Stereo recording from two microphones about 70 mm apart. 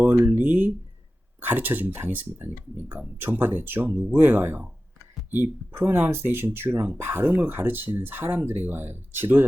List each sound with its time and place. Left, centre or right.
0.2 s speech: right